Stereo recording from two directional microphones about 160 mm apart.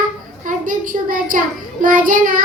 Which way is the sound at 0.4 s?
55° right (ahead or behind).